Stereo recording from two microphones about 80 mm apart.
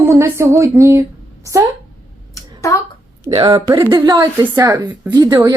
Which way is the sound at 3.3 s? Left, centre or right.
Right.